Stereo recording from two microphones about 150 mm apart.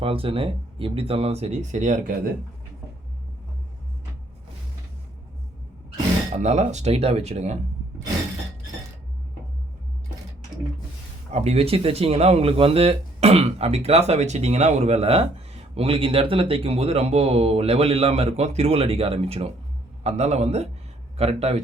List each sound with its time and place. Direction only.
0.0 s speech: 35° right (ahead or behind); by 2.1 s 55° right (ahead or behind)
6.3 s speech: 50° right (ahead or behind)
11.3 s speech: 45° right (ahead or behind)